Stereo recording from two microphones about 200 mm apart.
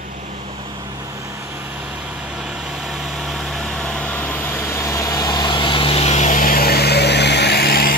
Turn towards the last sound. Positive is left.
turn(degrees=50)  # may be behind; listen again after turning